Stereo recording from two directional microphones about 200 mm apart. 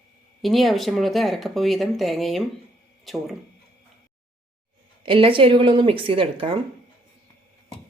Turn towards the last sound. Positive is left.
turn(degrees=-25)  # may be behind; listen again after turning